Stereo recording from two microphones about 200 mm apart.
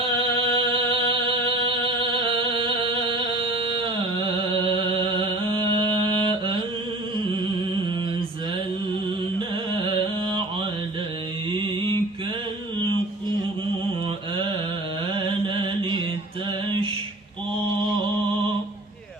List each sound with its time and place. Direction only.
0.2 s music: 25° right (ahead or behind)
9.7 s carnatic music: 25° right (ahead or behind)
15.1 s mantra: 25° right (ahead or behind)